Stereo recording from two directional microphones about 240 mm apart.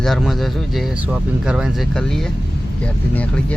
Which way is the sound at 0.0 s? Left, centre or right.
Centre.